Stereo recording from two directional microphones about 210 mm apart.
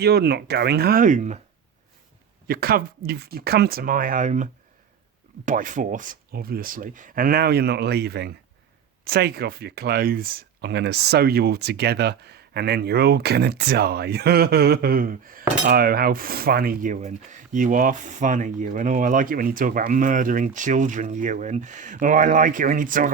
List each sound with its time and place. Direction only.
0.0 s speech: 50° right (ahead or behind)
2.5 s speech: 45° right (ahead or behind)
5.5 s speech: 40° right (ahead or behind)